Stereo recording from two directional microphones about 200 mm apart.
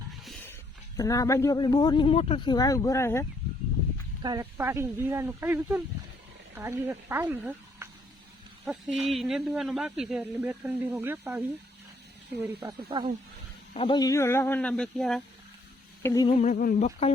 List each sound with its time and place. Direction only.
0.3 s a sound: 5° left (ahead or behind)
0.9 s speech: 15° left (ahead or behind)
4.2 s speech: 20° right (ahead or behind)
12.5 s speech: 20° right (ahead or behind)
13.7 s speech: 25° left (ahead or behind); by 15.2 s 5° left (ahead or behind)
16.0 s speech: 20° left (ahead or behind)
16.4 s speech: 40° left (ahead or behind)